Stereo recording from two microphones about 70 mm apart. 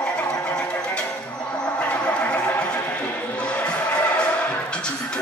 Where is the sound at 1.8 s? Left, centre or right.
Centre.